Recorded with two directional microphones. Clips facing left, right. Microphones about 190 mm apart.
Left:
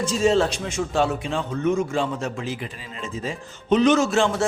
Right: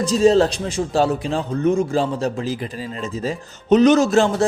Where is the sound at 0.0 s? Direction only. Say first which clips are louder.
Right 5 dB; 35° right (ahead or behind).